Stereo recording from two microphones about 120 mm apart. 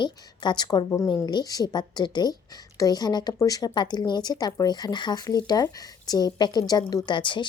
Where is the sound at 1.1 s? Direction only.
35° left (ahead or behind).